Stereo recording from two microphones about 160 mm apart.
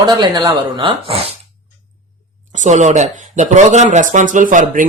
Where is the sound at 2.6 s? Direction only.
50° right (ahead or behind).